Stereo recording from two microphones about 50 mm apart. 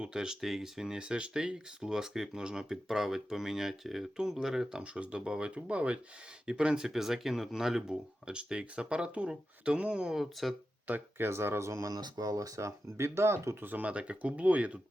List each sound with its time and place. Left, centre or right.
0.0 s speech: centre
4.8 s speech: right; by 7.9 s centre
8.3 s speech: centre
10.2 s speech: centre
10.8 s speech: right
11.3 s speech: right
13.7 s speech: right
13.9 s speech: right